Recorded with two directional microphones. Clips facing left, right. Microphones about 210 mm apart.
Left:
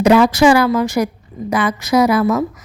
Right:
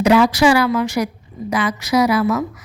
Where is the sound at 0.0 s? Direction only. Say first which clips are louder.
Left 2 dB; 50° left (ahead or behind).